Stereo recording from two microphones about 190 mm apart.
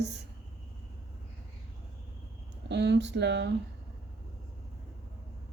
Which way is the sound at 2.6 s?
65° right (ahead or behind).